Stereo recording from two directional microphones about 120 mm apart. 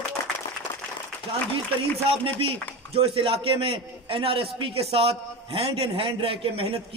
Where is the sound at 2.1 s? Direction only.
50° right (ahead or behind).